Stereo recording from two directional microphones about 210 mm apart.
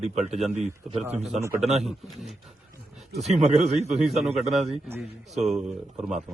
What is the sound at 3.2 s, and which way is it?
Speech, 30° right (ahead or behind).